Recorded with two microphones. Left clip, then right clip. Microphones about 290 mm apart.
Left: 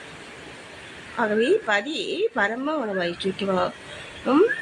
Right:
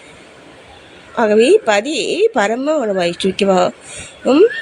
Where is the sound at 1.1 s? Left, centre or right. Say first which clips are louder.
Right 10 dB; centre.